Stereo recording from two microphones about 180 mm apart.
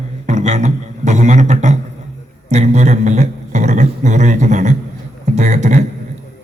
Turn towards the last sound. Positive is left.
turn(degrees=-40)  # may be behind; listen again after turning